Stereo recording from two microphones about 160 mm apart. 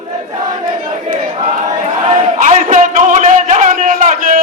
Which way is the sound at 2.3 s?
55° right (ahead or behind).